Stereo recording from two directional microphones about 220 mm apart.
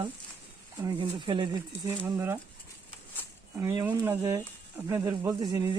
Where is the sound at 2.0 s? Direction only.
10° right (ahead or behind).